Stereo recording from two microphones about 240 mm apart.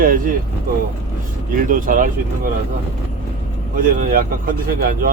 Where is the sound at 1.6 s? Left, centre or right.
Right.